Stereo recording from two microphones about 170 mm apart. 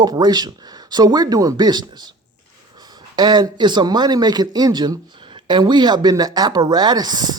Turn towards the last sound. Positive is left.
turn(degrees=-25)  # may be behind; listen again after turning